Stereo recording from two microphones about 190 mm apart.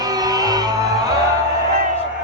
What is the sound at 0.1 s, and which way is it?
Music, 20° right (ahead or behind).